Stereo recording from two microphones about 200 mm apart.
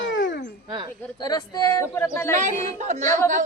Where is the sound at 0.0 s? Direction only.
65° left (ahead or behind).